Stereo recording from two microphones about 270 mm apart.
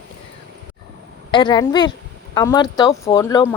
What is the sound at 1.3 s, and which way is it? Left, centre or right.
Speech, centre.